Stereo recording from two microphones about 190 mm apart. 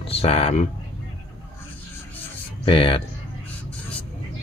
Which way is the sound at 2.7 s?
30° left (ahead or behind).